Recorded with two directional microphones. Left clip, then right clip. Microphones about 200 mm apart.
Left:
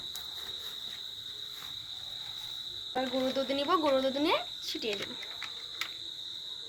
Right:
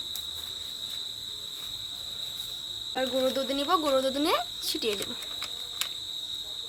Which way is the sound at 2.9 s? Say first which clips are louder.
Right 4 dB; 40° right (ahead or behind).